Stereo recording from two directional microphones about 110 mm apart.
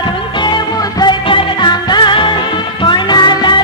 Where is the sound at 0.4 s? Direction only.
40° left (ahead or behind).